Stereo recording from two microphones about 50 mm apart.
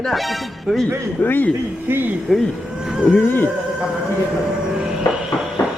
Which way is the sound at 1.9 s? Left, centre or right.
Right.